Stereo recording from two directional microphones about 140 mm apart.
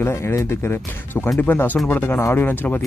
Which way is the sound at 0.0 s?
20° left (ahead or behind).